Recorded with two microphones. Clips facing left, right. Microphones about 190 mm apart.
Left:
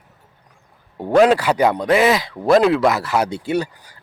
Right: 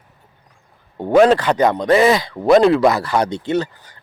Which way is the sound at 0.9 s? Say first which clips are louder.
Right 1 dB; centre (ahead or behind).